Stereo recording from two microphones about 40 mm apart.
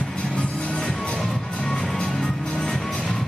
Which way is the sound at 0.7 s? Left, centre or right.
Centre.